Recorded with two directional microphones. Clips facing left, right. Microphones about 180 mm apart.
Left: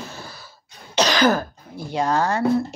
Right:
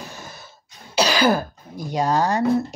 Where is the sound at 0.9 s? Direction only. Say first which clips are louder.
Even; 10° right (ahead or behind).